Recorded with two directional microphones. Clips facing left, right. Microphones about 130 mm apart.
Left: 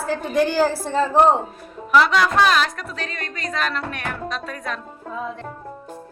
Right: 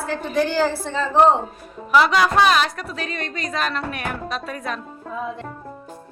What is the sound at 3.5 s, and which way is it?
Speech, centre (ahead or behind).